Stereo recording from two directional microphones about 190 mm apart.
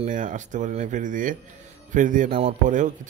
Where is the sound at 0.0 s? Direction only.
40° right (ahead or behind).